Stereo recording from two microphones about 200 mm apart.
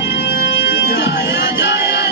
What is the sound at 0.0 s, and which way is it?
Music, 55° left (ahead or behind).